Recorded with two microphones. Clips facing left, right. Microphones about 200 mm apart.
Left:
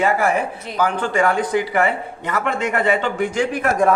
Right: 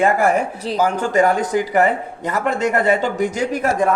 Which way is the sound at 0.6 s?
40° right (ahead or behind).